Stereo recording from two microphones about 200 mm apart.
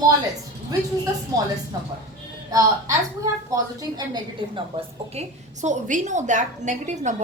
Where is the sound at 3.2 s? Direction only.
15° right (ahead or behind); by 7.2 s 35° right (ahead or behind).